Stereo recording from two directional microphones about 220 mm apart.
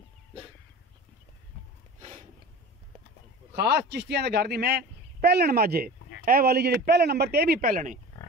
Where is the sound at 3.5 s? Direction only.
50° right (ahead or behind).